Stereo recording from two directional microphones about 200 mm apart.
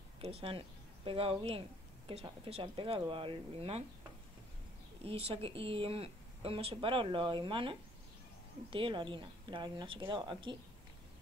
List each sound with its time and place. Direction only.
0.2 s a woman's voice: 30° right (ahead or behind)
5.0 s a woman's voice: 30° right (ahead or behind)